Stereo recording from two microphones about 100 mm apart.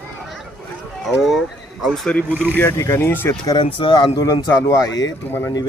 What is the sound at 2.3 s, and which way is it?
Speech, 20° right (ahead or behind).